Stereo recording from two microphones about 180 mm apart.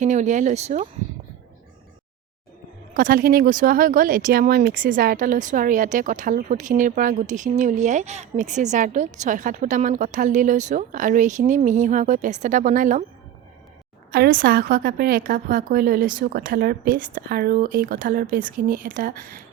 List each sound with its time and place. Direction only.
0.0 s speech: 40° right (ahead or behind)
2.9 s speech: 50° right (ahead or behind)
14.1 s speech: 55° right (ahead or behind)